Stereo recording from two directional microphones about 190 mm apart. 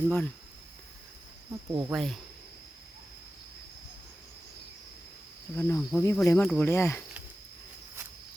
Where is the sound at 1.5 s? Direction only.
15° right (ahead or behind).